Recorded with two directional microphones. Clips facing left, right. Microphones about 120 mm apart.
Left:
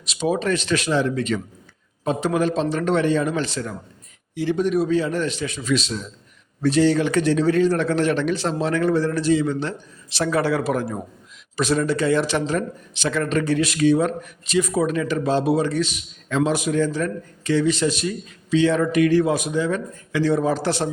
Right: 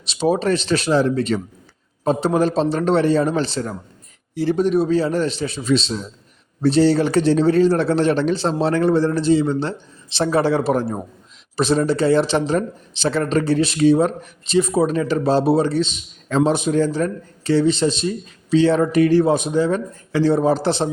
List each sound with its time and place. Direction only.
0.0 s speech: 30° right (ahead or behind)